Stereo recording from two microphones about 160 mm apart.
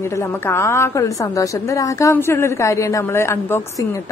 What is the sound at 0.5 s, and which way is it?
A woman's voice, 15° left (ahead or behind).